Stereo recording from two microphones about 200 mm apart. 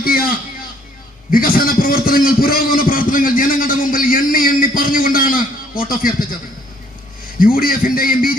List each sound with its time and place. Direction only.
0.0 s a man's voice: 45° left (ahead or behind)
1.3 s a sound: 45° left (ahead or behind)
7.3 s a man's voice: 45° left (ahead or behind)